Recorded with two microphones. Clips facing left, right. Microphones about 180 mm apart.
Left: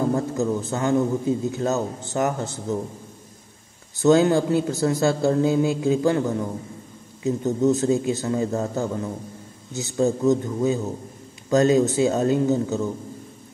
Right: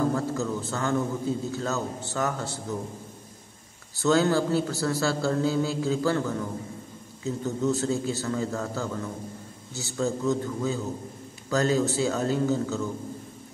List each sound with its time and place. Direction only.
0.1 s a man's voice: 20° left (ahead or behind)
4.0 s a man's voice: 20° left (ahead or behind)